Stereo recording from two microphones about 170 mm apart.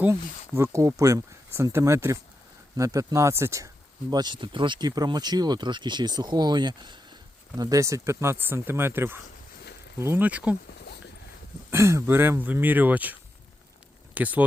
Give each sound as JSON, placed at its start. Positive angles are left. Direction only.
{"t": 0.0, "sound": "speech", "side_deg": -15}
{"t": 11.7, "sound": "speech", "side_deg": -15}